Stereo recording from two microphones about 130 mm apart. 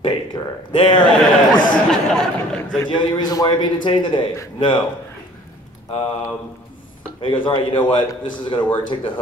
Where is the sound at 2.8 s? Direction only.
40° left (ahead or behind).